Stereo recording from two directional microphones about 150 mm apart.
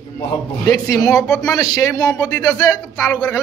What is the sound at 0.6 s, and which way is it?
Speech, 25° left (ahead or behind).